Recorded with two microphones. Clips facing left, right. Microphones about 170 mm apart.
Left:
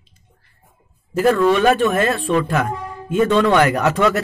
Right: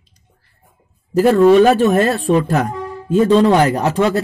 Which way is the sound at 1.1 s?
35° right (ahead or behind).